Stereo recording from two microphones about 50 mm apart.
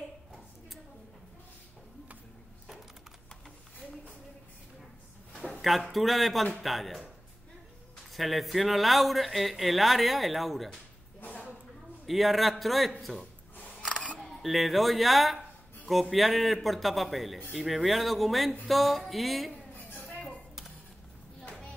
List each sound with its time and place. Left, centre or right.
5.5 s speech: centre
8.1 s speech: centre
12.1 s speech: centre
13.8 s single-lens reflex camera: centre
14.1 s speech: centre
19.7 s chink: left